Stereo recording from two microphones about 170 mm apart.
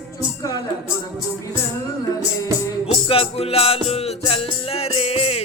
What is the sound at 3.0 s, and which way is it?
Music, 30° left (ahead or behind).